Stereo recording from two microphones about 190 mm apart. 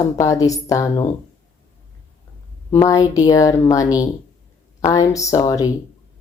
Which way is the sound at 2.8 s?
20° left (ahead or behind).